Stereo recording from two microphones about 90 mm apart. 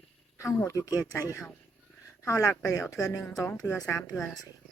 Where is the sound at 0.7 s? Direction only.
40° left (ahead or behind).